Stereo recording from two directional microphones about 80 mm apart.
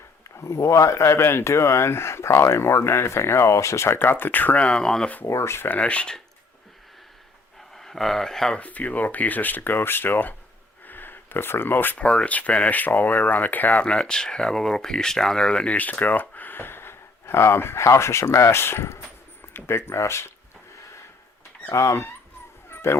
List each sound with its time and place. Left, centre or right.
0.3 s speech: left; by 5.1 s centre
5.2 s speech: left
5.7 s speech: centre
7.8 s speech: centre
8.6 s speech: centre
10.8 s a sound: left
11.9 s speech: centre
13.8 s speech: centre; by 20.3 s left
21.7 s speech: left
22.7 s bow-wow: left